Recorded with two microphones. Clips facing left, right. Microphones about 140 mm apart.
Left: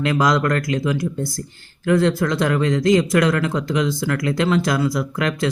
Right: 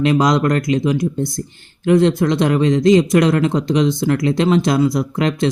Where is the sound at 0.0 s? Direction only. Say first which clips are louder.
Right 4 dB; 20° right (ahead or behind).